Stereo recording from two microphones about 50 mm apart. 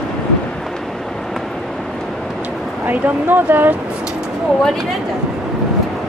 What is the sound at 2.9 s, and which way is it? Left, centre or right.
Speech, right.